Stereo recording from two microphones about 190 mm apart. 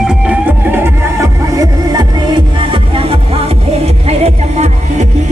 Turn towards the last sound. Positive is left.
turn(degrees=-35)  # may be behind; listen again after turning